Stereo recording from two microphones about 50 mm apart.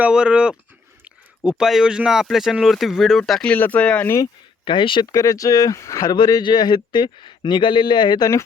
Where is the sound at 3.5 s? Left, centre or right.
Left.